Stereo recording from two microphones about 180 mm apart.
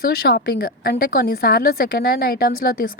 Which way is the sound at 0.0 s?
60° left (ahead or behind).